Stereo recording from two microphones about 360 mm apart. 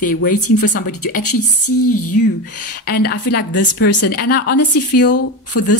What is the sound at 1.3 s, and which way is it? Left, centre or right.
Speech, left.